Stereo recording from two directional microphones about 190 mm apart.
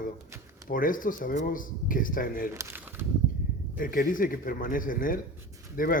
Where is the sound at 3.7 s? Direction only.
45° left (ahead or behind).